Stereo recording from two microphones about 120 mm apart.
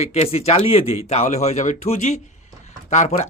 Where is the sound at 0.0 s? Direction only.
60° left (ahead or behind).